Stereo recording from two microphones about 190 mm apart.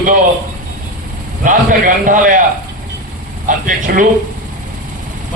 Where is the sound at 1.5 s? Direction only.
45° right (ahead or behind).